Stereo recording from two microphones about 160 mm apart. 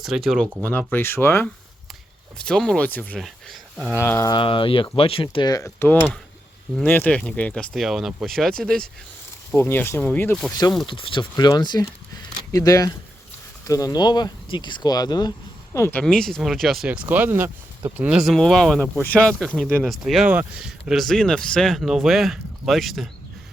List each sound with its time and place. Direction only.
0.0 s speech: centre (ahead or behind)
0.6 s speech: 10° left (ahead or behind)
2.4 s speech: 5° left (ahead or behind)
3.2 s speech: centre (ahead or behind)
3.9 s speech: 15° left (ahead or behind)
4.3 s speech: 30° left (ahead or behind); by 10.4 s 10° left (ahead or behind)
10.5 s speech: 25° left (ahead or behind)
15.7 s speech: 15° left (ahead or behind)